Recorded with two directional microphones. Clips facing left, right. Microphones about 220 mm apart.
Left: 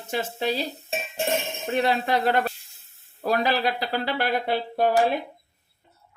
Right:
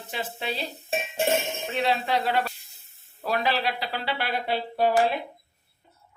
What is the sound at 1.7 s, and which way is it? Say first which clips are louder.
Speech: left 3 dB; 45° left (ahead or behind).